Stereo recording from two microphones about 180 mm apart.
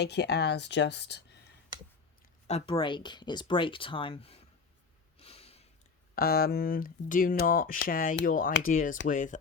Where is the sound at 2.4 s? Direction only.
35° left (ahead or behind).